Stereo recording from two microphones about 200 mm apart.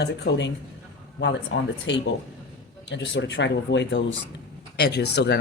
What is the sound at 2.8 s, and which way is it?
A woman's voice, 65° left (ahead or behind).